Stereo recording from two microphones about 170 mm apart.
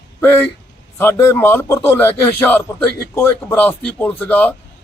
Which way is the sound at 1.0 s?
15° left (ahead or behind).